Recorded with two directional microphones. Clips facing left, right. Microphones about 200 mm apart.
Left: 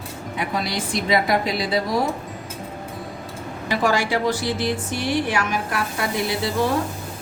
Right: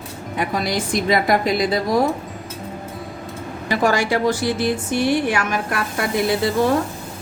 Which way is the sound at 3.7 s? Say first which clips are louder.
Right 2 dB; 45° right (ahead or behind).